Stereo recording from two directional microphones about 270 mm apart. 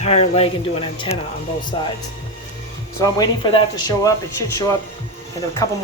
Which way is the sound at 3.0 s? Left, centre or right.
Centre.